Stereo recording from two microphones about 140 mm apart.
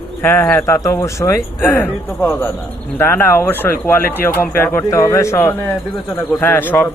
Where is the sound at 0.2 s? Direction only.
15° left (ahead or behind).